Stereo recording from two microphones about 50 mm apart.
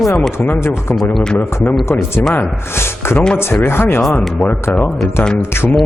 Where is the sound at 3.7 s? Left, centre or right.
Left.